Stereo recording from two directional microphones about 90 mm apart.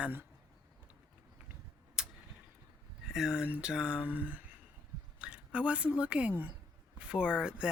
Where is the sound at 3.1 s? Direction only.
5° right (ahead or behind).